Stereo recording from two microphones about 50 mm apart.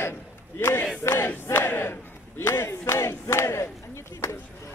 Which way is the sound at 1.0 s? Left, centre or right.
Left.